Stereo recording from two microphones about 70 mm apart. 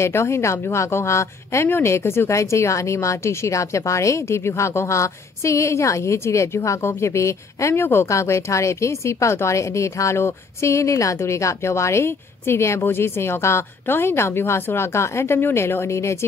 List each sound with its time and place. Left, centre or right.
0.0 s speech: left